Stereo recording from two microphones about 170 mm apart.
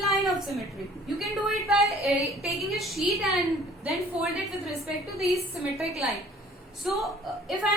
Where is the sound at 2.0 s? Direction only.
Centre (ahead or behind).